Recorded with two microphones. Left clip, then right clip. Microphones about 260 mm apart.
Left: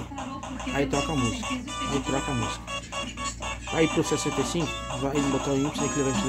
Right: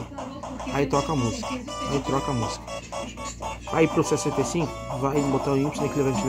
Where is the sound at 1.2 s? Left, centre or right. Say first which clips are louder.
Even; left.